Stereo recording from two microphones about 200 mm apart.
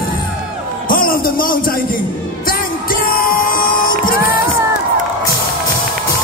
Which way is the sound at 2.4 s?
45° left (ahead or behind).